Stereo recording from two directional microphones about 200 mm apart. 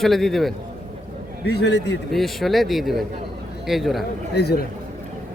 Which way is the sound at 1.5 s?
55° left (ahead or behind).